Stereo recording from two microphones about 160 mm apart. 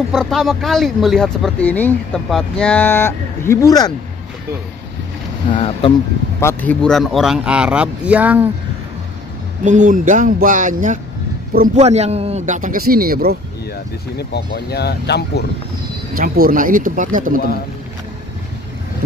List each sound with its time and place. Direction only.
0.1 s speech: centre (ahead or behind); by 3.9 s 25° left (ahead or behind)
5.5 s speech: 30° left (ahead or behind)
6.4 s speech: 10° left (ahead or behind); by 8.5 s 10° right (ahead or behind)
9.7 s a man's voice: 50° right (ahead or behind)
11.8 s a man's voice: 45° right (ahead or behind); by 13.4 s 70° right (ahead or behind)
14.1 s speech: 90° left
16.2 s speech: 65° right (ahead or behind)